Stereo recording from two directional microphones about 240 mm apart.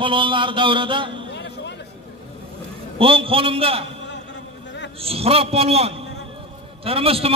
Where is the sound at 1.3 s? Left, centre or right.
Left.